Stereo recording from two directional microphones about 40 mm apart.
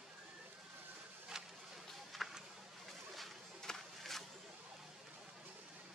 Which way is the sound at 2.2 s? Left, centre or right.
Centre.